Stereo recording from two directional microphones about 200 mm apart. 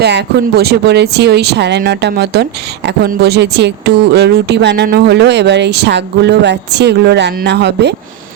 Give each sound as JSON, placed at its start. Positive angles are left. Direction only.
{"t": 0.0, "sound": "speech", "side_deg": -55}